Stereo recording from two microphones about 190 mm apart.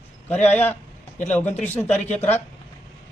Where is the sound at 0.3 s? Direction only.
10° left (ahead or behind).